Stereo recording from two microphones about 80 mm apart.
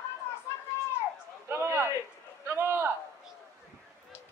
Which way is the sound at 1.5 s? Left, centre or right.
Right.